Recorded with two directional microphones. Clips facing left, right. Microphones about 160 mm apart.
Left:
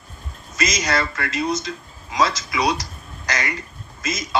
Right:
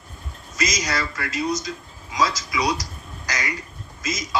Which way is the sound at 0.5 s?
60° left (ahead or behind).